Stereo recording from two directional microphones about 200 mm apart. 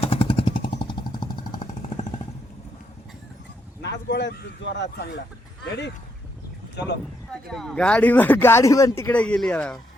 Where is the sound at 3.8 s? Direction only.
60° left (ahead or behind).